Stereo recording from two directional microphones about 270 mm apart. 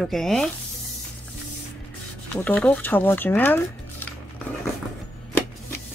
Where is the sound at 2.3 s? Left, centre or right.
Centre.